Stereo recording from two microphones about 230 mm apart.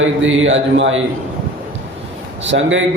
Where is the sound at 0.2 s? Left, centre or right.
Right.